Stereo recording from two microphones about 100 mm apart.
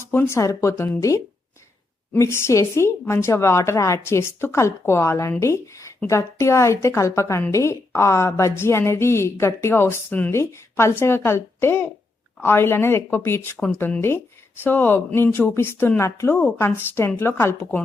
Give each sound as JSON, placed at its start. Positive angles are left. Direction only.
{"t": 0.0, "sound": "a woman's voice", "side_deg": 25}
{"t": 14.6, "sound": "a woman's voice", "side_deg": 20}